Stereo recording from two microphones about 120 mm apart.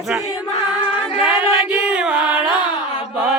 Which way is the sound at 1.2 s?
15° right (ahead or behind).